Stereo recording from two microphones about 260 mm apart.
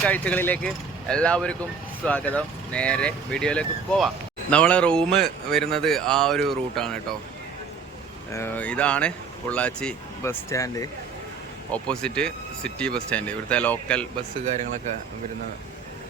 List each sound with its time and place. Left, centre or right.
0.0 s speech: centre
8.3 s speech: centre
14.4 s speech: right